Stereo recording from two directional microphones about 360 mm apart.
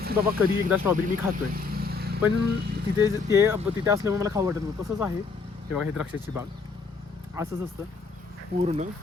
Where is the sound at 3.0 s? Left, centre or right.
Centre.